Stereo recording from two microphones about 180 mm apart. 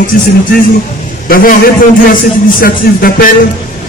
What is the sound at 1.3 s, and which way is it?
A man's voice, 50° left (ahead or behind).